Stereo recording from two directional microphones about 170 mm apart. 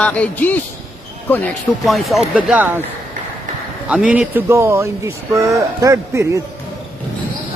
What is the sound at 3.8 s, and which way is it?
Speech, 5° right (ahead or behind).